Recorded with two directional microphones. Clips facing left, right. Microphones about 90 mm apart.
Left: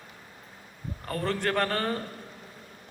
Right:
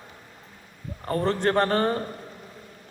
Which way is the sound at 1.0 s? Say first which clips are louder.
Right 6 dB; 30° right (ahead or behind).